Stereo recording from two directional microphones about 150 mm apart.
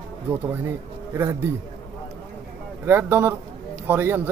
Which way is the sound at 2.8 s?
15° right (ahead or behind).